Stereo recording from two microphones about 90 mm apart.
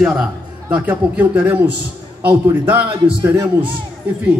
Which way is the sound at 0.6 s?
15° right (ahead or behind).